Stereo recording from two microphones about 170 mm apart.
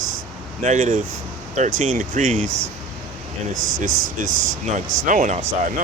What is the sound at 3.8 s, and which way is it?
Speech, 50° right (ahead or behind).